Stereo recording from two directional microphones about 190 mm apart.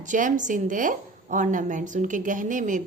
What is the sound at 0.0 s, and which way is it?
A woman's voice, 40° right (ahead or behind).